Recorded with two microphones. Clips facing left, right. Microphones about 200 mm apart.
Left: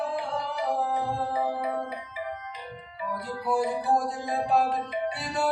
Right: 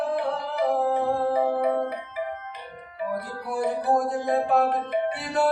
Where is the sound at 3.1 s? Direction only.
55° right (ahead or behind).